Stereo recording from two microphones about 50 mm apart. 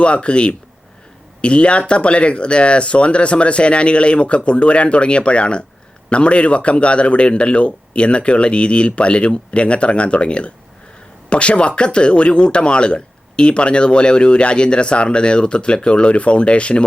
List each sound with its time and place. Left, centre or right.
0.0 s speech: left